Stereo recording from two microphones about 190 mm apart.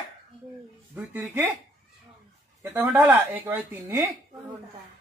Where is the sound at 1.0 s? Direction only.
5° right (ahead or behind).